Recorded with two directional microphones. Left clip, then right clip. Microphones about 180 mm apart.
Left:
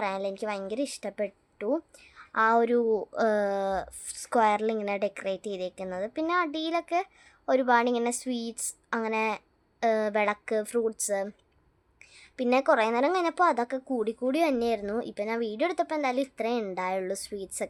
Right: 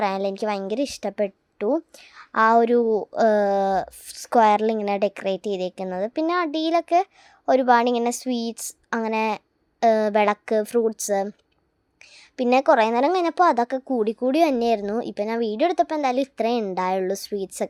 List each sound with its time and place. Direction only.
0.0 s a woman's voice: 35° right (ahead or behind)
12.4 s a woman's voice: 30° right (ahead or behind)